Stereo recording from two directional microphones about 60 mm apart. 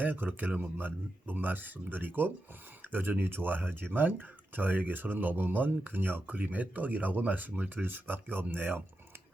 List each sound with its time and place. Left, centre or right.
0.0 s speech: right